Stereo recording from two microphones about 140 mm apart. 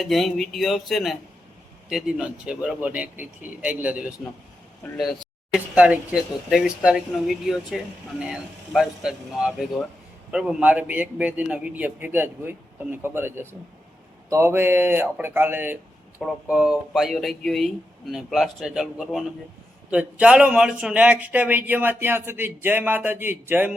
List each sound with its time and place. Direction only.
0.0 s a man's voice: centre (ahead or behind)
4.8 s speech: 10° left (ahead or behind)
5.5 s a man's voice: 10° right (ahead or behind)